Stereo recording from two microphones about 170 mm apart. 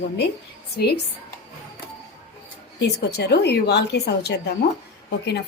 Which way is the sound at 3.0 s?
75° left (ahead or behind).